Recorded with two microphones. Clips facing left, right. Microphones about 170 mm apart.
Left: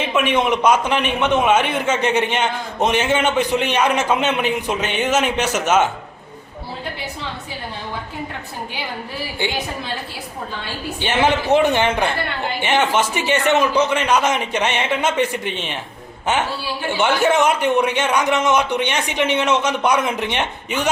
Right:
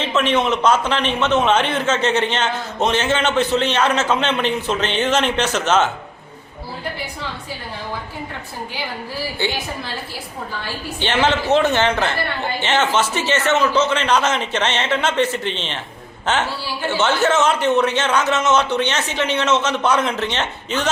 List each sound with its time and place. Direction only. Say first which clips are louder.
0.0 s a man's voice: even; 10° left (ahead or behind)
9.4 s a man's voice: right 1 dB; 15° left (ahead or behind)
11.0 s a man's voice: even; 10° left (ahead or behind)